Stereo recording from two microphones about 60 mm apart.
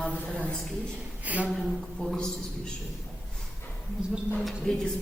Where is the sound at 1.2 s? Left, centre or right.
Right.